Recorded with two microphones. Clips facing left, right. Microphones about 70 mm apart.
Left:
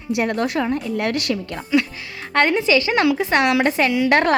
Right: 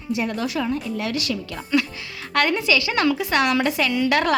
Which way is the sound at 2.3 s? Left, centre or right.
Left.